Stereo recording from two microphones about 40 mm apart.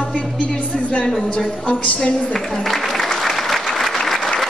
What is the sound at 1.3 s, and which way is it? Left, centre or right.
Speech, left.